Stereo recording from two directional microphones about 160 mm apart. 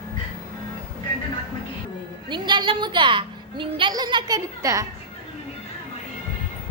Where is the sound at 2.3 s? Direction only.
30° right (ahead or behind).